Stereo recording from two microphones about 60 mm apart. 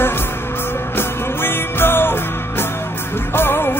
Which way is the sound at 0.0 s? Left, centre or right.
Left.